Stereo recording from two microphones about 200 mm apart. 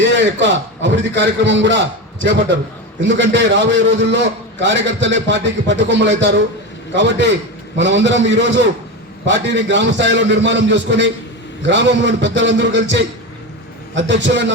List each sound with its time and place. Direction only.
0.2 s a man's voice: 65° right (ahead or behind)